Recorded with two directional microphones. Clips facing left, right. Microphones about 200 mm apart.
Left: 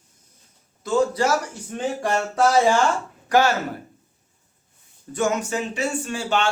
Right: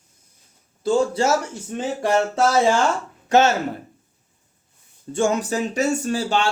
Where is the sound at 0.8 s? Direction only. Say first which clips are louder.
Right 1 dB; 30° right (ahead or behind).